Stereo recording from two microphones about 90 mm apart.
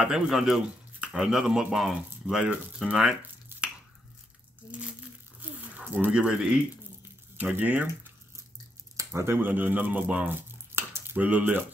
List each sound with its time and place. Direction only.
0.0 s speech: 5° right (ahead or behind)
5.8 s speech: 15° right (ahead or behind)
6.2 s speech: 5° right (ahead or behind)
8.9 s speech: 30° right (ahead or behind)